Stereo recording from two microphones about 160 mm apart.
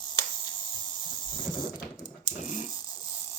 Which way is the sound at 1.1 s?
30° left (ahead or behind).